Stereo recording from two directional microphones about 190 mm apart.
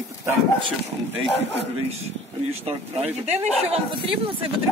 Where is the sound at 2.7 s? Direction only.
35° right (ahead or behind).